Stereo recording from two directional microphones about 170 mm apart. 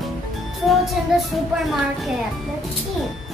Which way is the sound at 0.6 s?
Centre (ahead or behind).